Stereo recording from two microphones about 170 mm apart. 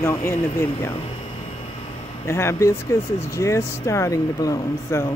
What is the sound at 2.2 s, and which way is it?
Speech, 15° left (ahead or behind).